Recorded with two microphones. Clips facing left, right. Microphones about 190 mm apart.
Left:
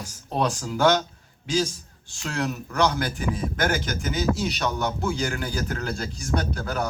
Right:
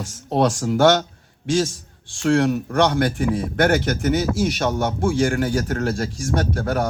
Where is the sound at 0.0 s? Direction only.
80° right.